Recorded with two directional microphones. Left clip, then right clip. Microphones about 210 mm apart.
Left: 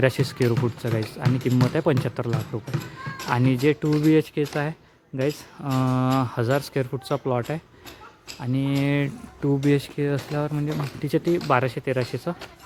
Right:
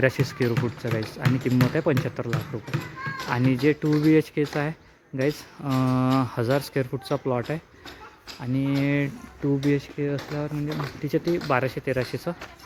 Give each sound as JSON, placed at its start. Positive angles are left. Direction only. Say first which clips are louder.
{"t": 0.0, "sound": "speech", "louder": "left 1 dB", "side_deg": 5}
{"t": 1.2, "sound": "speech", "louder": "right 2 dB", "side_deg": -40}
{"t": 1.6, "sound": "speech", "louder": "left 2 dB", "side_deg": 5}
{"t": 9.6, "sound": "speech", "louder": "left 4 dB", "side_deg": 20}